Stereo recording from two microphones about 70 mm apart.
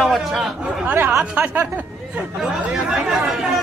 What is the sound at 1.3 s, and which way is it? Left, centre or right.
Speech, right.